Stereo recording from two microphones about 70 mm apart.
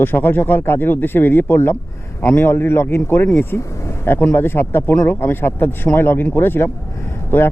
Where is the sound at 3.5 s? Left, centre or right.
Left.